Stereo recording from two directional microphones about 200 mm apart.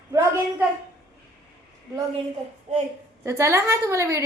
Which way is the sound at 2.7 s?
35° right (ahead or behind).